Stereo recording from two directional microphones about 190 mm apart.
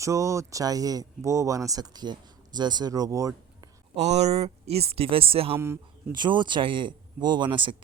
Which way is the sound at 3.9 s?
35° right (ahead or behind).